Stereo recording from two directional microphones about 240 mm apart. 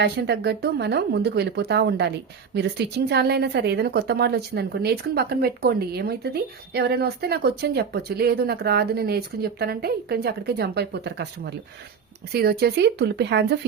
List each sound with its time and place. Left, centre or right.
0.0 s a woman's voice: right